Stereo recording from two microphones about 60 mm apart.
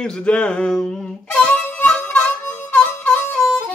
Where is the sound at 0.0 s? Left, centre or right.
Centre.